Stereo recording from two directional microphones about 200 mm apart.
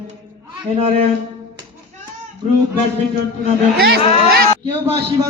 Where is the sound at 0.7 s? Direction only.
30° right (ahead or behind).